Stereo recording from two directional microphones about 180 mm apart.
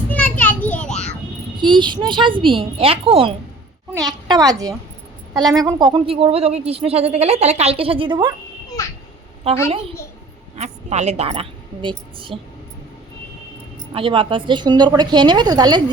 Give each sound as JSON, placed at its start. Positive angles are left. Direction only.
{"t": 0.1, "sound": "children playing", "side_deg": 10}
{"t": 1.5, "sound": "a woman's voice", "side_deg": -25}
{"t": 3.9, "sound": "a woman's voice", "side_deg": -20}
{"t": 9.5, "sound": "a woman's voice", "side_deg": -35}
{"t": 13.9, "sound": "a woman's voice", "side_deg": -30}